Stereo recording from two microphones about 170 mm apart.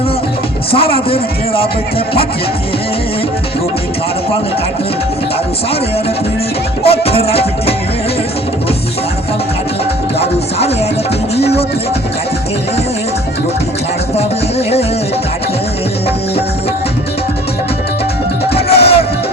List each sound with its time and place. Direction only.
0.7 s speech: 35° left (ahead or behind)
6.8 s music: 35° left (ahead or behind)
11.3 s music: 35° left (ahead or behind)
18.5 s music: 35° left (ahead or behind)